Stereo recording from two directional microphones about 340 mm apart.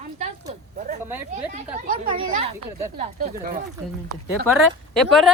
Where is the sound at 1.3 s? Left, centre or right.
Right.